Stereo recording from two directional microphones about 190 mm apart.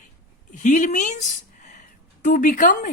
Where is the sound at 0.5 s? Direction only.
40° left (ahead or behind).